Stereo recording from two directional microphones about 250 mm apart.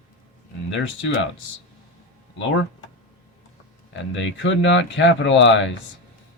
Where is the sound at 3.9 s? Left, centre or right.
Left.